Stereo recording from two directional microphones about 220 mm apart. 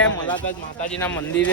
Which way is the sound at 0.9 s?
10° left (ahead or behind).